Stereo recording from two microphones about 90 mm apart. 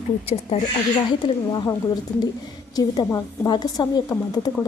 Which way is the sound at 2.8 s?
40° left (ahead or behind).